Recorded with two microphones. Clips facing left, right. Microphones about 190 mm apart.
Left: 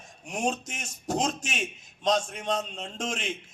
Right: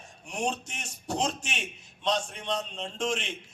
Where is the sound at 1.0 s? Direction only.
40° left (ahead or behind).